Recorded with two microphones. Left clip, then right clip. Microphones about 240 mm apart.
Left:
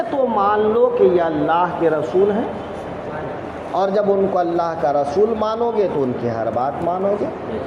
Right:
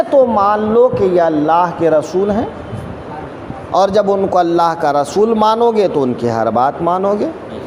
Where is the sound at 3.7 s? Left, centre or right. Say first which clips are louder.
Right 5 dB; right.